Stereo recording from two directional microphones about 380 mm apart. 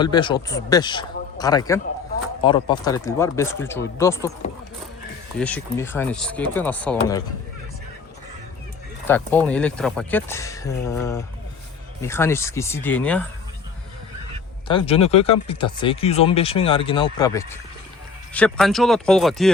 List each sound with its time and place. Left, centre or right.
0.0 s speech: centre
5.4 s speech: centre
9.0 s speech: centre
14.7 s speech: centre